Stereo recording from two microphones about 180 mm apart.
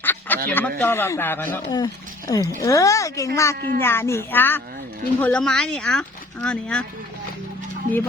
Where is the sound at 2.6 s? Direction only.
15° left (ahead or behind).